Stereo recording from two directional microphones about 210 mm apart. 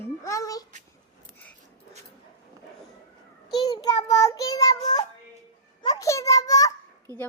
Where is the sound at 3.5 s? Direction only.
20° left (ahead or behind).